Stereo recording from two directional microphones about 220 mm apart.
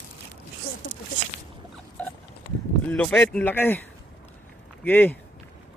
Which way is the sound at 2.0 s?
5° left (ahead or behind).